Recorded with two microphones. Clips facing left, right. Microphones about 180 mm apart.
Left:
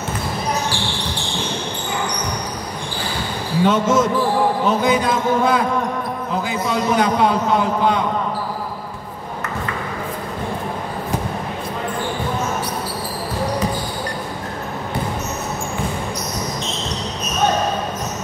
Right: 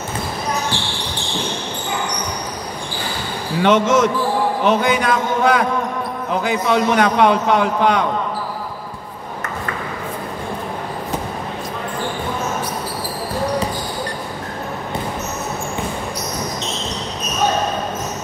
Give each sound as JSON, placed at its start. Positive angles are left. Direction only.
{"t": 3.6, "sound": "a man's voice", "side_deg": -75}